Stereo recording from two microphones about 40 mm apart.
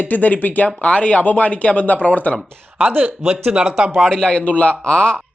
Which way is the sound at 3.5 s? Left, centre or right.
Right.